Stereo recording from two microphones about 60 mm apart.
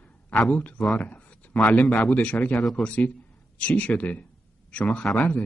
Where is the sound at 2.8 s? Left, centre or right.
Left.